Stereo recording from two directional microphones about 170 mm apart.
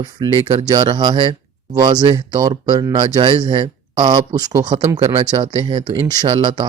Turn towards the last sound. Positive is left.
turn(degrees=-35)  # may be behind; listen again after turning